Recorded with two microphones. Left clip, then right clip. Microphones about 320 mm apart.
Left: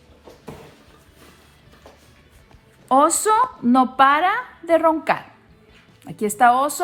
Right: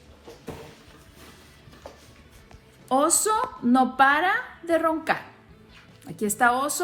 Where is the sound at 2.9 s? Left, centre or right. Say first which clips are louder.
Left 6 dB; left.